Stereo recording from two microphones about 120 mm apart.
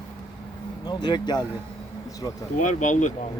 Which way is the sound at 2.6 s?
90° left.